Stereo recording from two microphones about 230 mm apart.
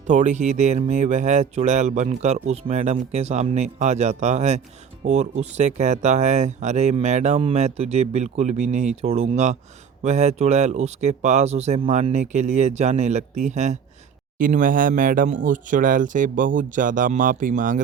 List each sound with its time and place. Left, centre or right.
0.1 s speech: right